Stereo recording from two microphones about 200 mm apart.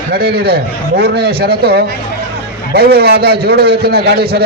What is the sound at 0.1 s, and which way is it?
A man's voice, 50° right (ahead or behind).